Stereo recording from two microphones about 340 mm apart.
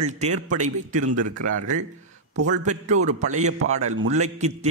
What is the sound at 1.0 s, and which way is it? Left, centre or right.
Speech, right.